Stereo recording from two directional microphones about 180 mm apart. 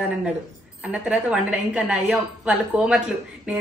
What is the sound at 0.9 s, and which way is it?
A woman's voice, 5° right (ahead or behind).